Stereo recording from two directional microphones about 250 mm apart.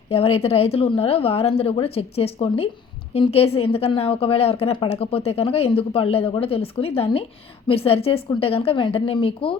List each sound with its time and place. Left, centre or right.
0.1 s speech: left